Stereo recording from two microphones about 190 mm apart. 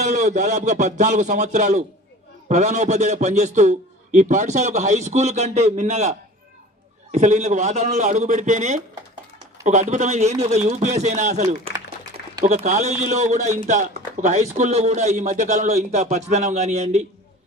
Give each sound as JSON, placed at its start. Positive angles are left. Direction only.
{"t": 0.0, "sound": "a man's voice", "side_deg": -40}
{"t": 12.5, "sound": "a man's voice", "side_deg": -35}